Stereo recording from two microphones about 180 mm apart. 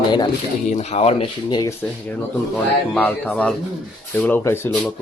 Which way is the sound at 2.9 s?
5° left (ahead or behind).